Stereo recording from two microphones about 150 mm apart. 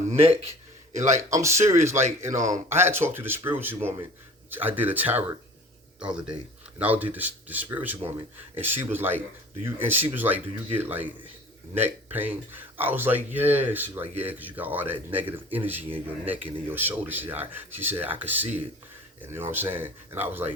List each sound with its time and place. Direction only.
0.1 s speech: 40° right (ahead or behind)
1.3 s a man's voice: 20° right (ahead or behind)